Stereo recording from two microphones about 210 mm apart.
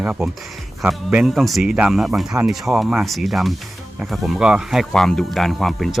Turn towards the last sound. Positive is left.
turn(degrees=0)  # may be behind; listen again after turning